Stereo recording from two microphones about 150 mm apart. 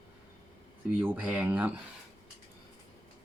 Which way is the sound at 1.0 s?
10° right (ahead or behind).